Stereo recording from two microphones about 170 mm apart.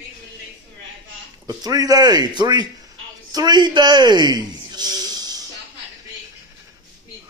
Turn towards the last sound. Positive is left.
turn(degrees=-25)  # may be behind; listen again after turning